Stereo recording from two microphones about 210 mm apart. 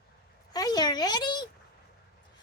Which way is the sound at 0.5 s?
20° left (ahead or behind).